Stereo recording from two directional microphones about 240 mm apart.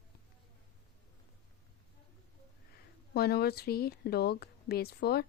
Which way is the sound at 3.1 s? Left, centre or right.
Left.